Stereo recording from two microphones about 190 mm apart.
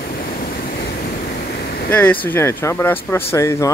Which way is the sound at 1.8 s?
10° left (ahead or behind).